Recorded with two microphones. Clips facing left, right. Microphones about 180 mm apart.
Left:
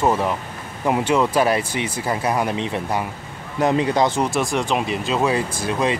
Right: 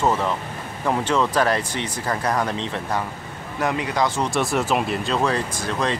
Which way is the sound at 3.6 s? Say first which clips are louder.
Left 5 dB; 25° left (ahead or behind).